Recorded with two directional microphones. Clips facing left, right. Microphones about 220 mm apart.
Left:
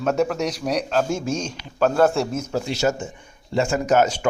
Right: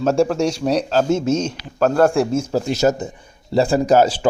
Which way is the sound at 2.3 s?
30° right (ahead or behind).